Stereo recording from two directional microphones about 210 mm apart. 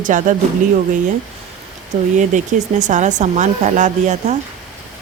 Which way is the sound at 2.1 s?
35° right (ahead or behind).